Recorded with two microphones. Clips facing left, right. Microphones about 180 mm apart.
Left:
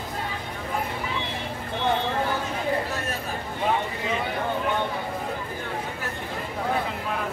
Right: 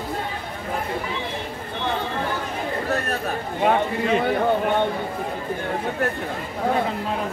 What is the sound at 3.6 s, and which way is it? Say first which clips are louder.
Speech: right 6 dB; 60° right (ahead or behind).